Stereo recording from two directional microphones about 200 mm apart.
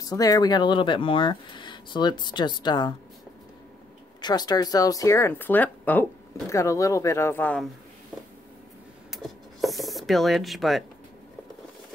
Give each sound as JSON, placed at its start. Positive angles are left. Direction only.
{"t": 0.0, "sound": "speech", "side_deg": 20}
{"t": 4.2, "sound": "speech", "side_deg": 20}
{"t": 9.1, "sound": "a sound", "side_deg": 0}